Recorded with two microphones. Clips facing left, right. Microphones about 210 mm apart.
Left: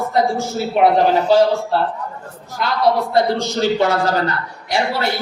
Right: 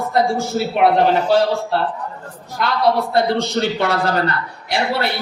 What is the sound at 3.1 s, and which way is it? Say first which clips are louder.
A man's voice: even; 60° right (ahead or behind).